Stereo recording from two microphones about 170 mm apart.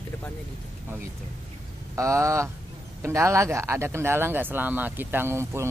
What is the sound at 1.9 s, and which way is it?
Speech, 15° right (ahead or behind).